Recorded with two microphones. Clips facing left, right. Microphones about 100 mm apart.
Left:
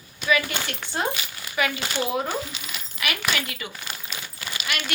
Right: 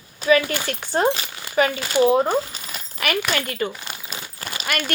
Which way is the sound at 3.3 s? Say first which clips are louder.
Right 6 dB; 45° right (ahead or behind).